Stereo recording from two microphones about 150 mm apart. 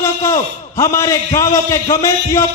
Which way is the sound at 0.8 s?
20° left (ahead or behind).